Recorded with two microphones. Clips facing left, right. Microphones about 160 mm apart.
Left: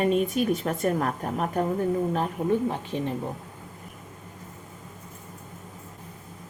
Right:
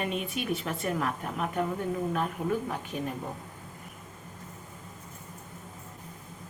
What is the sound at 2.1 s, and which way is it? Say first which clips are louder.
A woman's voice: left 4 dB; 30° left (ahead or behind).